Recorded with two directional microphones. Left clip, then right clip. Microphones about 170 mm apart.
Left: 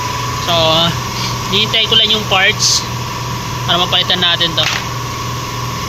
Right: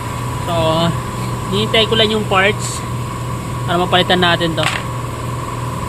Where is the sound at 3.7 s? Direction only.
45° right (ahead or behind).